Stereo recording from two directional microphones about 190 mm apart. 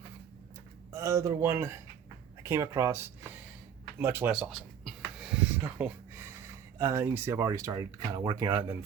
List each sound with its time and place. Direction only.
0.9 s speech: 15° right (ahead or behind)
4.0 s a sound: 10° right (ahead or behind)
6.7 s speech: 15° right (ahead or behind)